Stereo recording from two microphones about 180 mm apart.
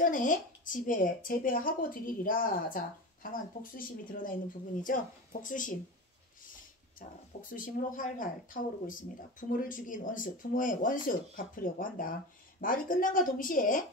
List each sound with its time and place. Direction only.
0.0 s speech: 50° left (ahead or behind)
7.0 s speech: 50° left (ahead or behind)